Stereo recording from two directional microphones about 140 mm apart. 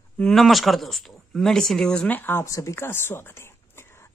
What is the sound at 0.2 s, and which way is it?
Speech, centre (ahead or behind).